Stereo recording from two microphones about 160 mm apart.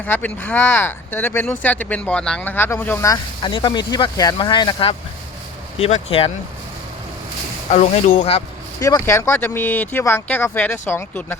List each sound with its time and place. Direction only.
0.0 s speech: 10° left (ahead or behind); by 6.3 s 35° left (ahead or behind)
7.7 s speech: 45° left (ahead or behind)
9.0 s speech: 15° left (ahead or behind)